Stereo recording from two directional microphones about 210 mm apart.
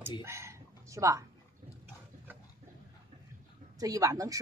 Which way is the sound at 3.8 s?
15° right (ahead or behind).